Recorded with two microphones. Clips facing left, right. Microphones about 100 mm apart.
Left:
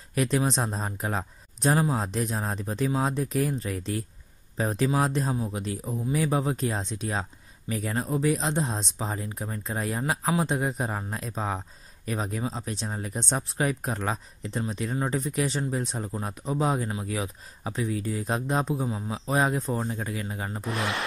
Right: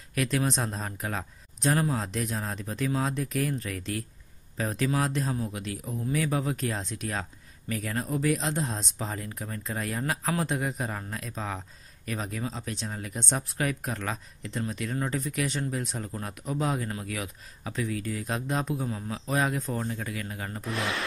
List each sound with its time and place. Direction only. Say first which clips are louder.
0.1 s speech: left 3 dB; 30° left (ahead or behind)
1.7 s speech: left 2 dB; 20° left (ahead or behind)
2.0 s speech: left 3 dB; 35° left (ahead or behind)
9.9 s speech: left 3 dB; 15° left (ahead or behind)
10.4 s speech: left 3 dB; 30° left (ahead or behind)
18.9 s speech: left 2 dB; 20° left (ahead or behind)
19.2 s speech: left 3 dB; 35° left (ahead or behind)